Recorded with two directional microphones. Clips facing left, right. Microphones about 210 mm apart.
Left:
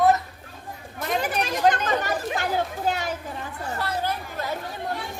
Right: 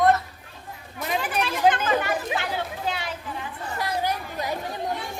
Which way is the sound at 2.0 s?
45° left (ahead or behind).